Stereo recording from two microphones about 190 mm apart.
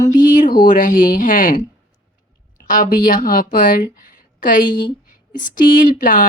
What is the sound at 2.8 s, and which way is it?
A woman's voice, 45° left (ahead or behind).